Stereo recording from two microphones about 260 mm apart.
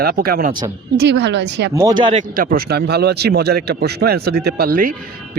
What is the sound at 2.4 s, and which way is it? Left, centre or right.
Speech, right.